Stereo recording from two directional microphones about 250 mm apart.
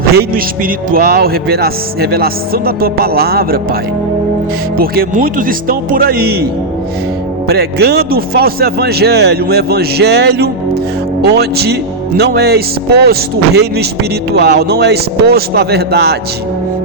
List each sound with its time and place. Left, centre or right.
0.2 s speech: right
4.8 s speech: right